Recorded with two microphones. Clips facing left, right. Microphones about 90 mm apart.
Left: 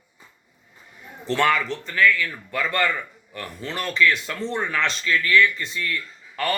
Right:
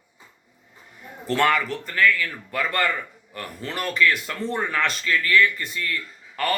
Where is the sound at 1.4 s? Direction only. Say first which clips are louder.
Even; 50° right (ahead or behind).